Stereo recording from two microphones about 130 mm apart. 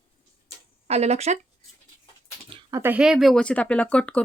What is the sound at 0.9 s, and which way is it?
Speech, 55° right (ahead or behind).